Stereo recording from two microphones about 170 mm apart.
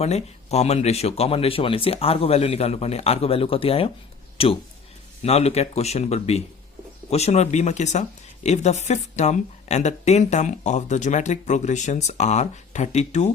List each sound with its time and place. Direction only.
0.0 s a woman's voice: 40° left (ahead or behind)